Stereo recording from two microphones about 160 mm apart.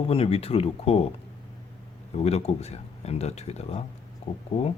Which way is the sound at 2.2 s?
45° left (ahead or behind).